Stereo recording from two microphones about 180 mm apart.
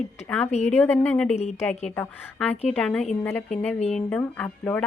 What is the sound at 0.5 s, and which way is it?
Speech, 40° left (ahead or behind).